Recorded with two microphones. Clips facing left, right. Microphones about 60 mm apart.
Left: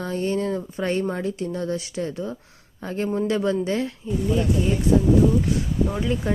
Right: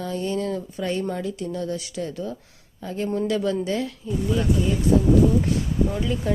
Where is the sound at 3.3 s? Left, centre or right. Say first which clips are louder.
Left 1 dB; left.